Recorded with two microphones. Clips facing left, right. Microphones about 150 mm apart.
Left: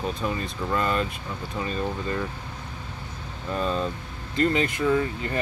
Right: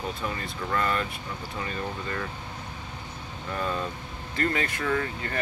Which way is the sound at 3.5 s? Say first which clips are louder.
Left 4 dB; 20° left (ahead or behind).